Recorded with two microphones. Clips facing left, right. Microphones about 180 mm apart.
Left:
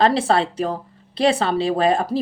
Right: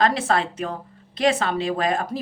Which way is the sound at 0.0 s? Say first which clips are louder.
Left 4 dB; 30° left (ahead or behind).